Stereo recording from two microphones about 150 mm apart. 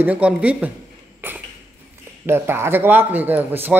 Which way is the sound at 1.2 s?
15° right (ahead or behind).